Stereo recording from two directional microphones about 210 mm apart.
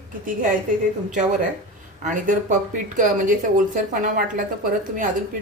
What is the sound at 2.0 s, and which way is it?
Speech, 35° right (ahead or behind).